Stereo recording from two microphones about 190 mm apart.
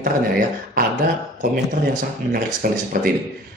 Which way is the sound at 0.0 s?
45° right (ahead or behind).